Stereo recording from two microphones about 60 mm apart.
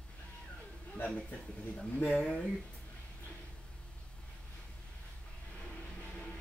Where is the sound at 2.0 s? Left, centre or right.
Centre.